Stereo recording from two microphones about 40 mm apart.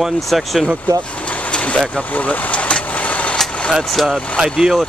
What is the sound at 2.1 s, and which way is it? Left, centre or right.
Speech, left.